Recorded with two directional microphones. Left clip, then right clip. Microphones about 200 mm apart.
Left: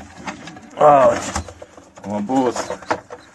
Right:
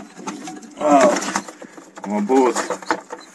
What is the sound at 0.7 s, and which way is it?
Speech, 25° left (ahead or behind).